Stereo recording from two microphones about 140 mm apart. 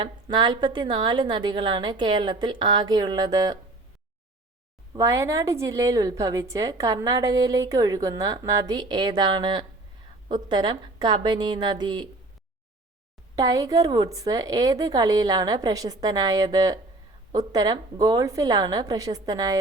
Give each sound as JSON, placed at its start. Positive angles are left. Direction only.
{"t": 0.0, "sound": "a woman's voice", "side_deg": -35}
{"t": 4.9, "sound": "a woman's voice", "side_deg": -25}
{"t": 13.3, "sound": "a woman's voice", "side_deg": -25}